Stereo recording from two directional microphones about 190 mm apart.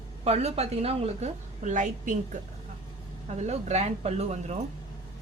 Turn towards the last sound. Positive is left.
turn(degrees=-35)  # may be behind; listen again after turning